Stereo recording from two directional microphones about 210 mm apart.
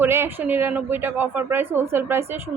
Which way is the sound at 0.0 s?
10° right (ahead or behind).